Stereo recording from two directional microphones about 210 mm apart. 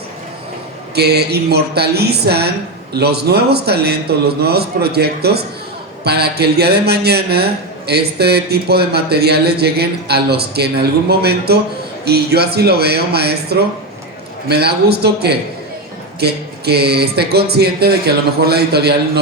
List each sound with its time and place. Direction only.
0.9 s a man's voice: 50° right (ahead or behind)